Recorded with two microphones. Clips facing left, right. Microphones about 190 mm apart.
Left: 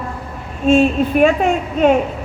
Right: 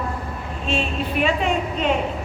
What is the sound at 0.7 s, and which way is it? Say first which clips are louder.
A woman's voice: left 12 dB; 45° left (ahead or behind).